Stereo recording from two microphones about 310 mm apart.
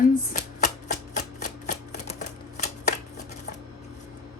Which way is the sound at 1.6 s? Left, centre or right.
Left.